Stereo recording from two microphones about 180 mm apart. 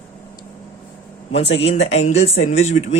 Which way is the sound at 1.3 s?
35° left (ahead or behind).